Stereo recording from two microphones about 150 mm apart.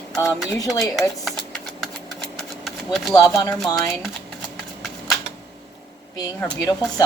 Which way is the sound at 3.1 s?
25° left (ahead or behind).